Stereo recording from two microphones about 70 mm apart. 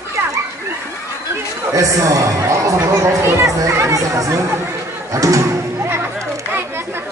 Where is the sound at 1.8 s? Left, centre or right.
Right.